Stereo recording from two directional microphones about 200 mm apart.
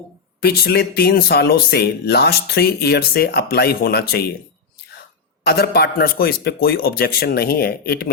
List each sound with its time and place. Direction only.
0.4 s speech: 50° left (ahead or behind)
5.4 s speech: 50° left (ahead or behind)